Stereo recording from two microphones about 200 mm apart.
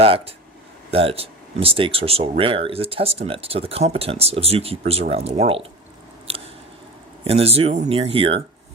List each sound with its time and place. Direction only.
0.0 s speech: 30° right (ahead or behind)
6.3 s scissors: 30° right (ahead or behind)
7.3 s speech: 30° right (ahead or behind)